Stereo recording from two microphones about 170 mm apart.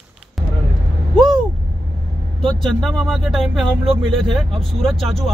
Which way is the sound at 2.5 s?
5° left (ahead or behind).